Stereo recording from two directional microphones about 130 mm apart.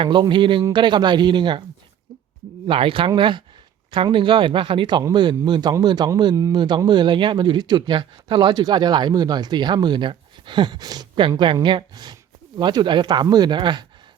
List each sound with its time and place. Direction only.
0.0 s a man's voice: 35° right (ahead or behind)
2.6 s a man's voice: 45° right (ahead or behind)